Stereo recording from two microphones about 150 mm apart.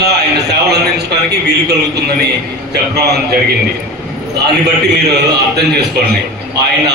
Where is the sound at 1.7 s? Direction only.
90° right.